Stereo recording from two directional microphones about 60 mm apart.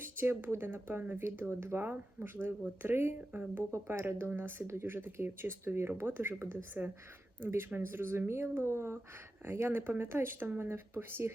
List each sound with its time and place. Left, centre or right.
0.0 s speech: right